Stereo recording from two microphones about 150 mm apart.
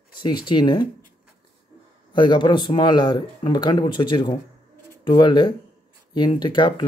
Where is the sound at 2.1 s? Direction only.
30° left (ahead or behind).